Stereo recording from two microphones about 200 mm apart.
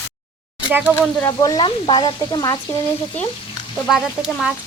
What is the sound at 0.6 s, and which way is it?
Speech, 5° right (ahead or behind).